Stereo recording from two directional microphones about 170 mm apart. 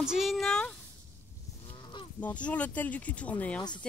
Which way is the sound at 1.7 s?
30° left (ahead or behind).